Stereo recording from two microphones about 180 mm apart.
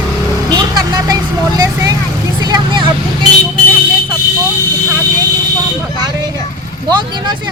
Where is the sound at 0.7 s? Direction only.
20° right (ahead or behind).